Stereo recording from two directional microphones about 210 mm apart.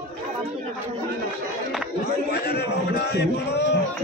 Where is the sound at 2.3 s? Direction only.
50° left (ahead or behind).